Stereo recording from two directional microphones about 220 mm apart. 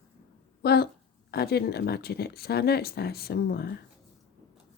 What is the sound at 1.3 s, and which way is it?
Speech, 45° left (ahead or behind).